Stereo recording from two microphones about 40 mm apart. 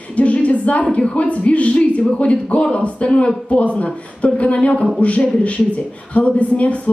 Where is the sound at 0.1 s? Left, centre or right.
Left.